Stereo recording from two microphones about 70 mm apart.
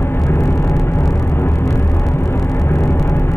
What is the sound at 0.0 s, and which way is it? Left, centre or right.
Vehicle, left.